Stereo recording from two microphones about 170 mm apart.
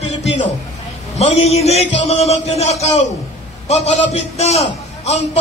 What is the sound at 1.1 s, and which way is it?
A man's voice, 40° left (ahead or behind).